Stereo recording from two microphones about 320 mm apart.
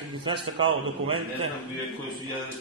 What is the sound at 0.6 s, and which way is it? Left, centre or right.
Speech, right.